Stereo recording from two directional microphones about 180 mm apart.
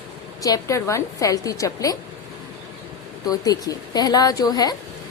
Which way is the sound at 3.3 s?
20° left (ahead or behind).